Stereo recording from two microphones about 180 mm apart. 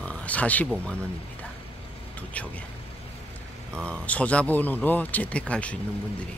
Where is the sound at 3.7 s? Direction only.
5° left (ahead or behind).